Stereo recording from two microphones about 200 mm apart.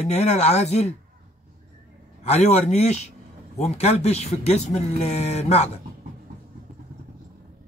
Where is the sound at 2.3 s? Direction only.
35° left (ahead or behind).